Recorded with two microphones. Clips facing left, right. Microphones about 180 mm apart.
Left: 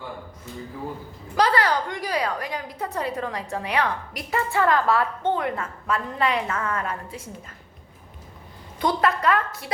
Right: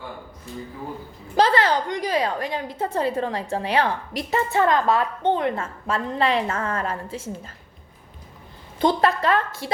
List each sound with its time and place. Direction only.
1.4 s a woman's voice: 25° right (ahead or behind)
8.8 s a woman's voice: 30° right (ahead or behind)